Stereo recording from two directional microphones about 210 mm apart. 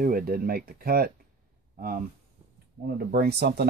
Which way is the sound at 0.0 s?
45° right (ahead or behind).